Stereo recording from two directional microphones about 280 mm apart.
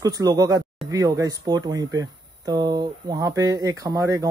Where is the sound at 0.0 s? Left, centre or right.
Centre.